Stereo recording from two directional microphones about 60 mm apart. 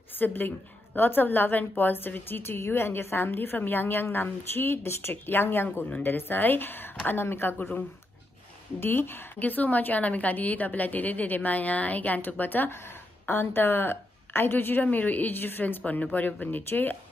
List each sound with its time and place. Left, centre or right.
0.2 s a woman's voice: left
7.5 s a woman's voice: left
8.7 s a woman's voice: left